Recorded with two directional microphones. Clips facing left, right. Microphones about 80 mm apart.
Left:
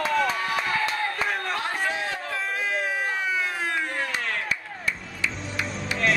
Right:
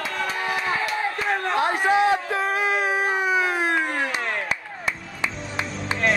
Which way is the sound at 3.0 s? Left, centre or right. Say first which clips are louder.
Right 5 dB; centre.